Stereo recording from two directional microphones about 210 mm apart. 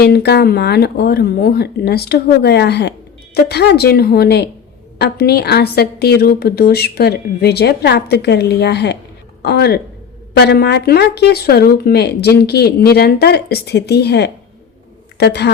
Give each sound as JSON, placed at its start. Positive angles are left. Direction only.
{"t": 0.0, "sound": "a woman's voice", "side_deg": 50}